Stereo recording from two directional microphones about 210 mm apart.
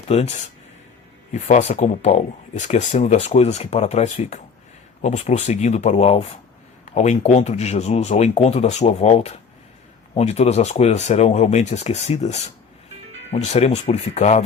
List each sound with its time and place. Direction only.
0.1 s speech: 30° left (ahead or behind)